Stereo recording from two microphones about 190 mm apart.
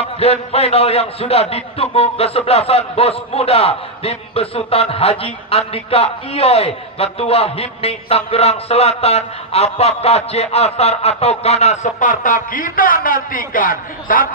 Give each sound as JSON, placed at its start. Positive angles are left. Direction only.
{"t": 0.0, "sound": "a man's voice", "side_deg": 30}